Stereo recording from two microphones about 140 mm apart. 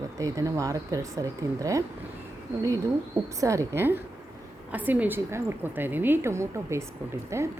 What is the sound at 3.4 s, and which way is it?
A woman's voice, 20° right (ahead or behind).